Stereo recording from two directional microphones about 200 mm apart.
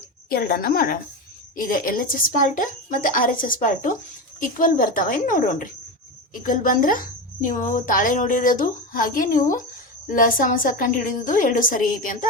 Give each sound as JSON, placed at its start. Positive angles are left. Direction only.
{"t": 0.3, "sound": "speech", "side_deg": 50}